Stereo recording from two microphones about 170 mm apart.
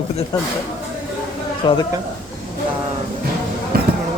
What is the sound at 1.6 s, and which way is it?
Speech, 30° left (ahead or behind).